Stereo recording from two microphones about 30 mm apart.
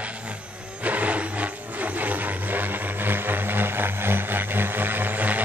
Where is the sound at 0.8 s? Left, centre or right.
Right.